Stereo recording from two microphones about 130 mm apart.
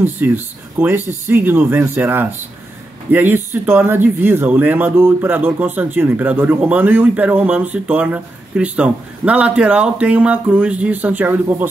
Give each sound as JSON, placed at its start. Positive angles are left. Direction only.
{"t": 0.2, "sound": "speech", "side_deg": -15}